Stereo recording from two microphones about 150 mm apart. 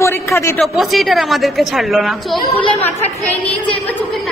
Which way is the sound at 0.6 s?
Centre (ahead or behind).